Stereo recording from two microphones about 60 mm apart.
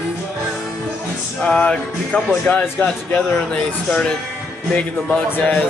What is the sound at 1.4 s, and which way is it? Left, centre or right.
Music, centre.